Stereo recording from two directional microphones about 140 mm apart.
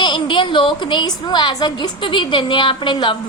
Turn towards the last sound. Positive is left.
turn(degrees=35)  # may be behind; listen again after turning